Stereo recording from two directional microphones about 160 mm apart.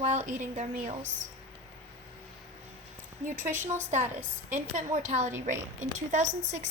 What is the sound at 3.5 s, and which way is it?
A woman's voice, 50° right (ahead or behind).